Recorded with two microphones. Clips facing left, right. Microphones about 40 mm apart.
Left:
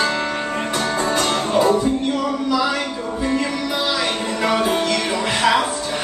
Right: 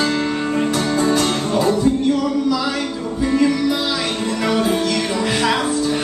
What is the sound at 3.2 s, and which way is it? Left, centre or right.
Music, centre.